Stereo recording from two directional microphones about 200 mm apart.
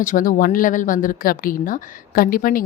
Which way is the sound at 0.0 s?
40° left (ahead or behind).